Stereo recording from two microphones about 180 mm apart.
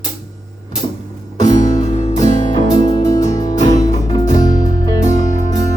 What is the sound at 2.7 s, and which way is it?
Music, 25° left (ahead or behind).